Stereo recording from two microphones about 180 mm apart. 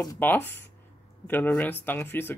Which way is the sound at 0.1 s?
10° left (ahead or behind).